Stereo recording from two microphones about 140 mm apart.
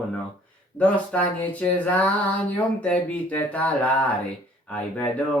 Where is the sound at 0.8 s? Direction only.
10° left (ahead or behind).